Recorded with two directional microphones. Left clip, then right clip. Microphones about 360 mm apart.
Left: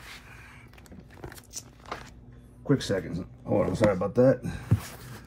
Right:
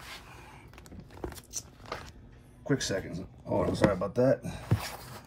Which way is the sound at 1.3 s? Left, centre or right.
Centre.